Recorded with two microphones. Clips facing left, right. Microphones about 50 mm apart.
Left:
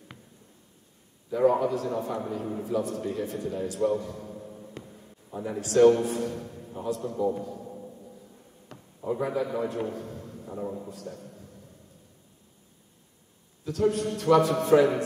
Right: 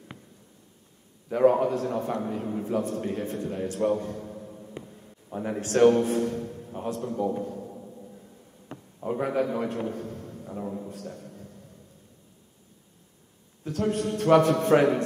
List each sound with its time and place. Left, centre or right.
1.3 s a man's voice: right
4.6 s music: centre
5.3 s a man's voice: right
6.5 s a sound: right
6.8 s a man's voice: right
7.1 s a man's voice: right
7.6 s music: centre
8.7 s a sound: right
9.0 s a man's voice: right
9.9 s a sound: right
10.6 s a man's voice: centre
10.9 s a man's voice: right
13.7 s a man's voice: right